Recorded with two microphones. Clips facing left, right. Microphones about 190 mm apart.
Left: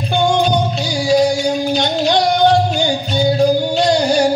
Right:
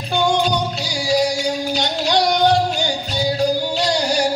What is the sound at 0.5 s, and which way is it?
Music, 25° left (ahead or behind).